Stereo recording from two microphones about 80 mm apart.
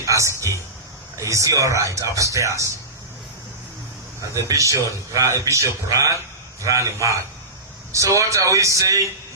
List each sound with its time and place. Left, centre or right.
0.0 s speech: right
4.4 s a man's voice: right